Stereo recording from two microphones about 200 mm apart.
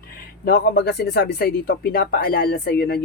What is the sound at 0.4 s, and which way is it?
Speech, 50° left (ahead or behind).